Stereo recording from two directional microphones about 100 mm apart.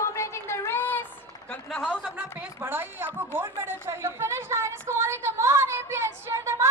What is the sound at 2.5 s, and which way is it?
Speech, 20° right (ahead or behind).